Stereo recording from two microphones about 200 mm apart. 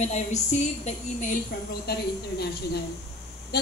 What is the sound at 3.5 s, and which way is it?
Speech, 50° left (ahead or behind).